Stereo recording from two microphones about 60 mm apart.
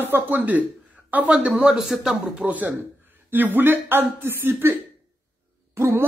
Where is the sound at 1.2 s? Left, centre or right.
Centre.